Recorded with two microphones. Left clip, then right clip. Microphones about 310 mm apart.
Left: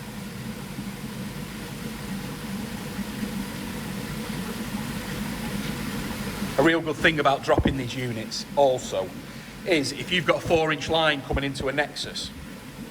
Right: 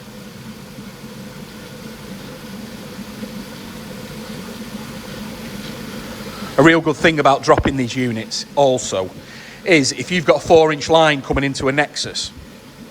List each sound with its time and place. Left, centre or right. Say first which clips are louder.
6.7 s speech: right 8 dB; right